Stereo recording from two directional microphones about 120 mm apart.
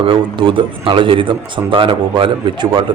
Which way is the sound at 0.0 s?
45° right (ahead or behind).